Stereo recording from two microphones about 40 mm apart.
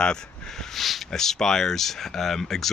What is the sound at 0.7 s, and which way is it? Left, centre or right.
Speech, centre.